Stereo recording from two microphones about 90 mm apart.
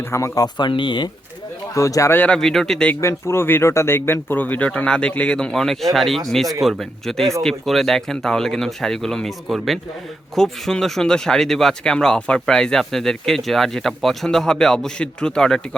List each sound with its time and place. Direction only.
0.1 s speech: 35° left (ahead or behind)
0.4 s speech: 55° left (ahead or behind)
1.7 s speech: 35° left (ahead or behind)
2.1 s speech: 15° left (ahead or behind)
2.4 s speech: 5° left (ahead or behind)
3.0 s speech: 30° left (ahead or behind); by 15.6 s 5° left (ahead or behind)